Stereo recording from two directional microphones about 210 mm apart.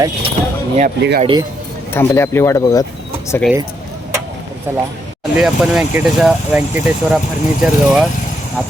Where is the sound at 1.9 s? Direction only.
10° left (ahead or behind).